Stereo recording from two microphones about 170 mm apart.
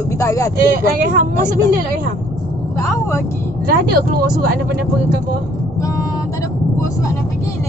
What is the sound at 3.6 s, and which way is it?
Speech, 60° right (ahead or behind).